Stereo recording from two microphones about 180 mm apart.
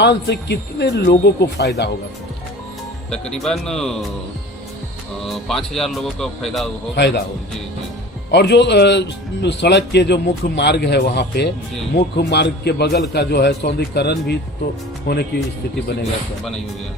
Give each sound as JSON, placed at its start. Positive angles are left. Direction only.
{"t": 0.0, "sound": "speech", "side_deg": 70}
{"t": 3.1, "sound": "speech", "side_deg": 5}
{"t": 5.2, "sound": "speech", "side_deg": 0}
{"t": 7.0, "sound": "speech", "side_deg": 80}
{"t": 8.3, "sound": "speech", "side_deg": 70}